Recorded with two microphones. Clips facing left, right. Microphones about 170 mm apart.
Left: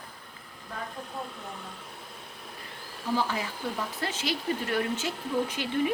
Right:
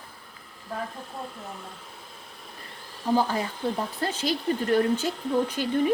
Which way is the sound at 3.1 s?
35° right (ahead or behind).